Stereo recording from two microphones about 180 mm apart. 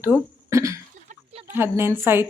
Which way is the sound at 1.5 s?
15° right (ahead or behind).